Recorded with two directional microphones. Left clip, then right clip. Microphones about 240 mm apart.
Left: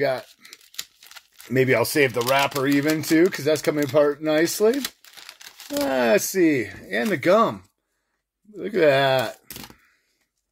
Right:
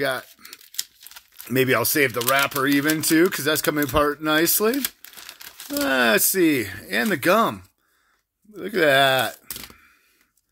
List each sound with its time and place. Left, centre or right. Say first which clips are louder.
0.0 s speech: left 1 dB; centre
0.7 s crumpling: right 3 dB; centre
1.5 s speech: left 1 dB; centre
5.9 s speech: right 1 dB; centre
8.5 s speech: right 1 dB; centre